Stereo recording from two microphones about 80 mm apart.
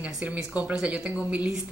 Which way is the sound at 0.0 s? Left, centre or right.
Centre.